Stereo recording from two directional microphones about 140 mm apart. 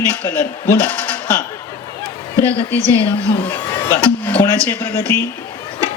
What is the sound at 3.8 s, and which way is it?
Speech, 15° left (ahead or behind).